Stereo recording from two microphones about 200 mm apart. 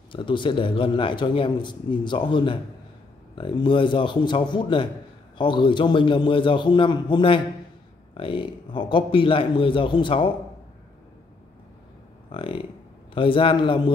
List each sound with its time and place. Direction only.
0.1 s a man's voice: 25° left (ahead or behind)
12.3 s a man's voice: 25° left (ahead or behind)